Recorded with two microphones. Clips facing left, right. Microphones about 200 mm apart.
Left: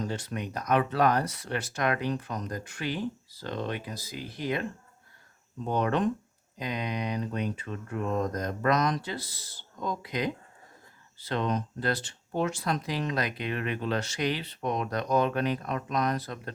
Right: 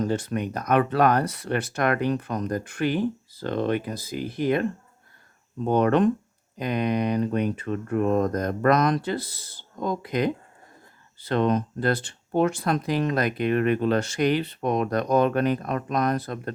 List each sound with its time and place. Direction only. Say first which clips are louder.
0.0 s speech: right 8 dB; 50° right (ahead or behind)
5.6 s speech: right 7 dB; 60° right (ahead or behind)